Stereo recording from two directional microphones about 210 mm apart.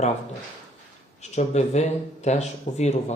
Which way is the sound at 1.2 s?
30° left (ahead or behind).